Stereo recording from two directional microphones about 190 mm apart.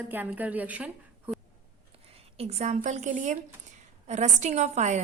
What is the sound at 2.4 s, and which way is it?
A woman's voice, 35° right (ahead or behind).